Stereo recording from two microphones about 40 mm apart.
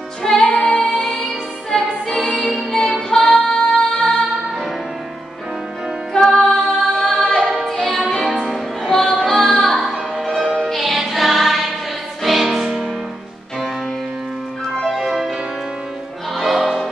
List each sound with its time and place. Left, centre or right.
0.4 s music: left
6.4 s music: centre
7.2 s a capella: centre
7.6 s music: centre
8.8 s music: centre
14.9 s music: centre
16.3 s music: centre